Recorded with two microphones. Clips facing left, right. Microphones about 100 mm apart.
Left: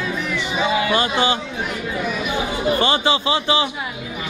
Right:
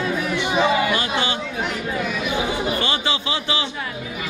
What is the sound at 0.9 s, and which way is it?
Speech, 30° left (ahead or behind).